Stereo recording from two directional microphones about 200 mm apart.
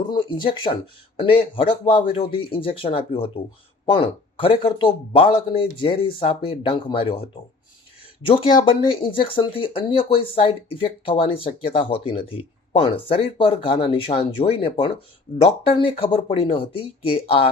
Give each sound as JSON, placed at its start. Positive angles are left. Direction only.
{"t": 0.1, "sound": "speech", "side_deg": 25}